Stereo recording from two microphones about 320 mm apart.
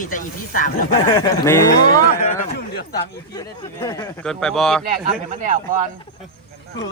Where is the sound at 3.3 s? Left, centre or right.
Centre.